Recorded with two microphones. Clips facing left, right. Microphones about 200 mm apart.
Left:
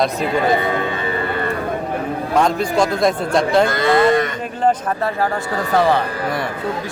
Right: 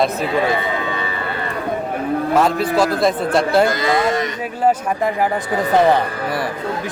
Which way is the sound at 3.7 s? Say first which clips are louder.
Left 3 dB; 55° left (ahead or behind).